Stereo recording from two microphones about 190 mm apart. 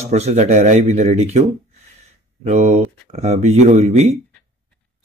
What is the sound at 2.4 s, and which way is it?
Mantra, 35° right (ahead or behind).